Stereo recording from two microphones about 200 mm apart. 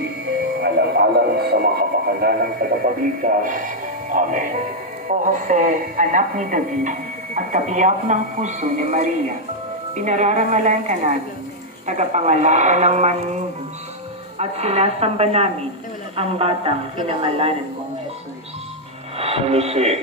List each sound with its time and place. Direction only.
0.6 s radio: 55° right (ahead or behind)
5.0 s speech: 40° right (ahead or behind)
19.1 s a man's voice: 30° right (ahead or behind)